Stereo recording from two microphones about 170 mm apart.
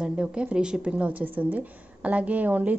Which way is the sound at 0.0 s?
5° right (ahead or behind).